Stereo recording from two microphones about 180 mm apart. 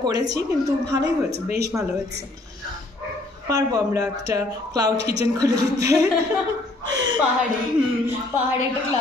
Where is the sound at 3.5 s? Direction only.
20° right (ahead or behind).